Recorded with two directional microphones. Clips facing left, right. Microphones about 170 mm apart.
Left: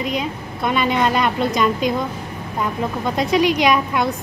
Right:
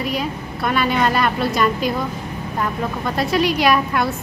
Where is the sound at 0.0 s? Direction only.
20° left (ahead or behind).